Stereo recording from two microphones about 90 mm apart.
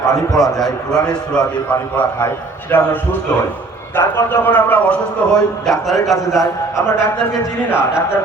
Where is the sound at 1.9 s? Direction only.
20° left (ahead or behind).